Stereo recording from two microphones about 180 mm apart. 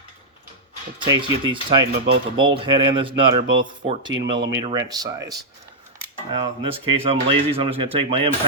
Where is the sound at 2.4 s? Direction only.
25° right (ahead or behind).